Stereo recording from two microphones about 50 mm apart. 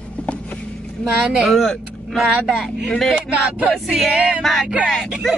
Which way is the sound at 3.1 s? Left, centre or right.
Right.